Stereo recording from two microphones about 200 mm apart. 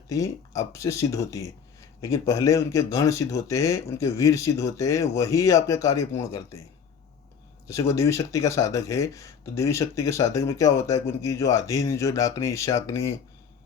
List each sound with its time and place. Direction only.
0.1 s speech: 15° left (ahead or behind)
7.7 s speech: 15° left (ahead or behind)